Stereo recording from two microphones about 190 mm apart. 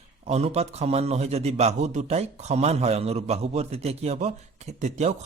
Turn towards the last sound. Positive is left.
turn(degrees=-35)  # may be behind; listen again after turning